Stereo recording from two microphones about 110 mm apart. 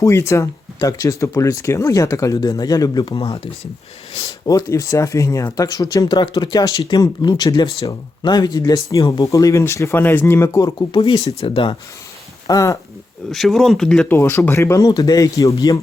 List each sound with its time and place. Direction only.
0.0 s speech: 25° left (ahead or behind)
3.1 s speech: 65° left (ahead or behind)
4.4 s speech: 30° left (ahead or behind)
11.0 s speech: 60° left (ahead or behind)
12.5 s speech: 30° left (ahead or behind)
13.3 s speech: centre (ahead or behind)
14.1 s speech: 25° left (ahead or behind)
14.8 s speech: 35° left (ahead or behind)